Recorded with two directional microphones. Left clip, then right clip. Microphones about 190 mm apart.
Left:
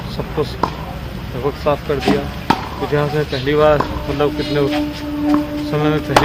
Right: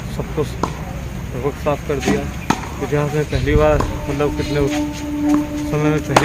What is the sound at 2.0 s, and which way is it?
Chop, 40° left (ahead or behind).